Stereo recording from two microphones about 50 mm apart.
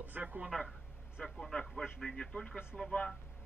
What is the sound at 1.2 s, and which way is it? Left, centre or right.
Speech, centre.